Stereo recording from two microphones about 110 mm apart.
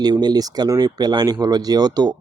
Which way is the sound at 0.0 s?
40° right (ahead or behind).